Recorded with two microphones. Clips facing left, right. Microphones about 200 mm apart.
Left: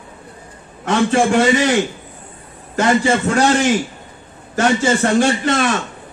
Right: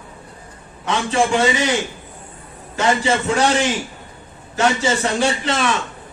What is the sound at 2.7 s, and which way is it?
Speech, 50° left (ahead or behind).